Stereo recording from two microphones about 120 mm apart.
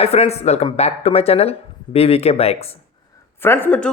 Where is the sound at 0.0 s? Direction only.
60° left (ahead or behind).